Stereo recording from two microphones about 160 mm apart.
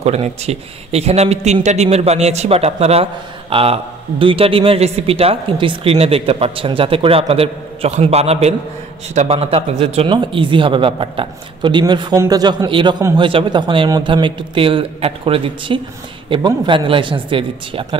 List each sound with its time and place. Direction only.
0.0 s a man's voice: 40° right (ahead or behind)